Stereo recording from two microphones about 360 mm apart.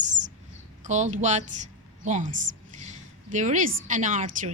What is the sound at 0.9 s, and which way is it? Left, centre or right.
Speech, centre.